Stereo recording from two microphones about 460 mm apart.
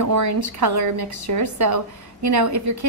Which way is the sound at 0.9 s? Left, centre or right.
Right.